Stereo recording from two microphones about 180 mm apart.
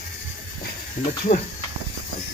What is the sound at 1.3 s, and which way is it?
Speech, 45° left (ahead or behind).